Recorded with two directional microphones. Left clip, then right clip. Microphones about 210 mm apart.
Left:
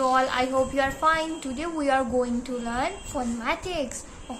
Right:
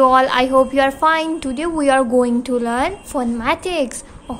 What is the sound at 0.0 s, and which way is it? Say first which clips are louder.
A woman's voice: right 10 dB; 50° right (ahead or behind).